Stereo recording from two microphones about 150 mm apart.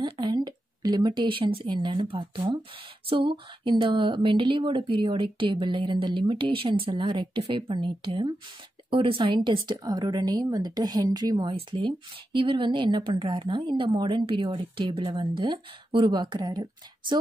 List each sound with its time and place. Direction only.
0.0 s speech: 30° right (ahead or behind)